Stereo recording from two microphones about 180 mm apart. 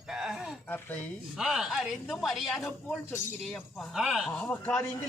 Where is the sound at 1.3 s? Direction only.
5° right (ahead or behind).